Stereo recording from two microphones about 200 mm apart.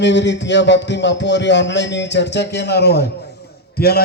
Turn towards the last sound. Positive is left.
turn(degrees=50)  # may be behind; listen again after turning